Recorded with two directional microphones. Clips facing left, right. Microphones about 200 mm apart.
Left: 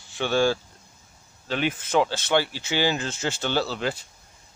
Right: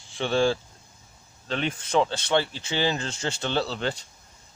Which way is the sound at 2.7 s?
10° left (ahead or behind).